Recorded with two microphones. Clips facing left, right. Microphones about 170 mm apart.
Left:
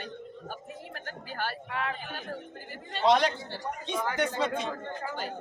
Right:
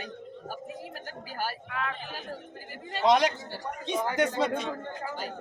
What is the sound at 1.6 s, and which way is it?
Speech, 30° left (ahead or behind).